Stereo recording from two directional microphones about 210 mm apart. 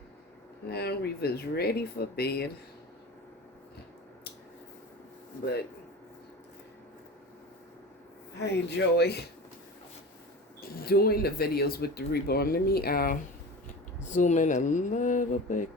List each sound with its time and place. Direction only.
0.7 s speech: 50° left (ahead or behind)
8.4 s speech: 55° left (ahead or behind)
10.6 s speech: 45° left (ahead or behind)